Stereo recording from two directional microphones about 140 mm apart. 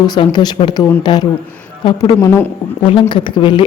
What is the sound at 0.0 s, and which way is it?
Speech, 30° left (ahead or behind).